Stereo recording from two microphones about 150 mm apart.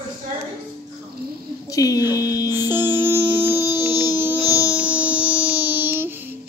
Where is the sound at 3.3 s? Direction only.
15° right (ahead or behind).